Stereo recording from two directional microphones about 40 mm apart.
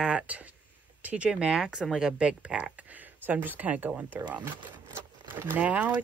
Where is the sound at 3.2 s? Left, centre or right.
Right.